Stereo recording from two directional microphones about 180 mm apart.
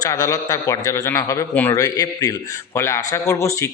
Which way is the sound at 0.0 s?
20° left (ahead or behind).